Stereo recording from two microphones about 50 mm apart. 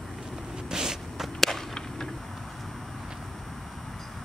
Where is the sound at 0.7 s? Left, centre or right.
Centre.